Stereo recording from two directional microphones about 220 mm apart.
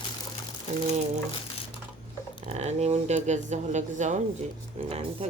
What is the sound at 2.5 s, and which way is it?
Speech, 30° right (ahead or behind).